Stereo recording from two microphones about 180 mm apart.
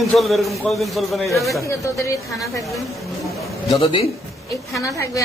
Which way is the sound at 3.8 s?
30° left (ahead or behind).